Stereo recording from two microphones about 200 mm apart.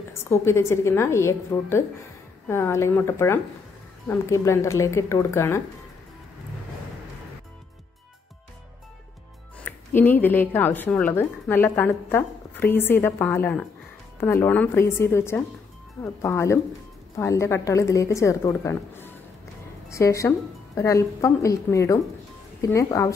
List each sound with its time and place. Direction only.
0.2 s speech: 15° left (ahead or behind)
9.7 s speech: 10° left (ahead or behind)